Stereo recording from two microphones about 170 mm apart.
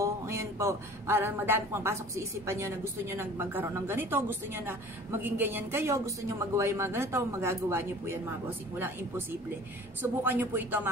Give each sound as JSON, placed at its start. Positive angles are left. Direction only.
{"t": 0.0, "sound": "speech", "side_deg": -15}